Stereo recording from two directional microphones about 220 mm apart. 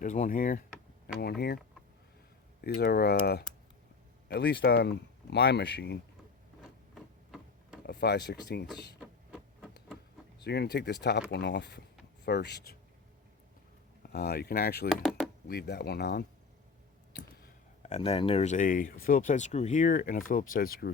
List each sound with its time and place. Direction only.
0.0 s speech: 35° left (ahead or behind)
2.6 s speech: 45° left (ahead or behind)
6.9 s tick-tock: centre (ahead or behind)
7.9 s speech: 50° left (ahead or behind)
9.0 s a sound: 5° left (ahead or behind)
10.4 s speech: 50° left (ahead or behind)
14.1 s speech: 45° left (ahead or behind)
14.8 s a sound: centre (ahead or behind)
15.4 s speech: 45° left (ahead or behind)
17.1 s a sound: 45° left (ahead or behind)
17.8 s speech: 30° left (ahead or behind)